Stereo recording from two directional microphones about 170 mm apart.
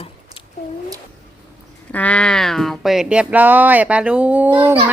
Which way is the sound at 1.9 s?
10° left (ahead or behind).